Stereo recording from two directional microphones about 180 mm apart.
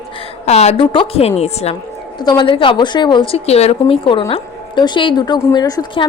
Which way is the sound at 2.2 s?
25° left (ahead or behind).